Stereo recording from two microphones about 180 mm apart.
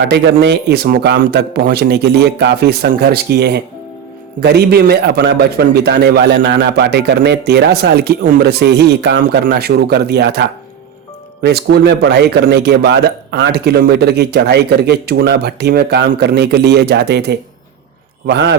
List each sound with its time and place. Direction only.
0.1 s a man's voice: 65° right (ahead or behind)
9.2 s a man's voice: 50° right (ahead or behind)
11.4 s a man's voice: 65° right (ahead or behind)